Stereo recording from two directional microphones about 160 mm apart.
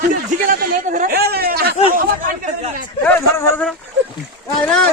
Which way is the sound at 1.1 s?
75° right (ahead or behind).